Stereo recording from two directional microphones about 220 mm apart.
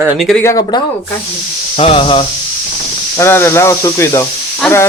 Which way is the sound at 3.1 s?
10° left (ahead or behind).